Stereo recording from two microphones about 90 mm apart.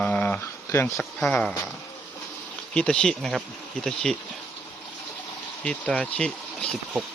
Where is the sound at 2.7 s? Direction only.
10° left (ahead or behind).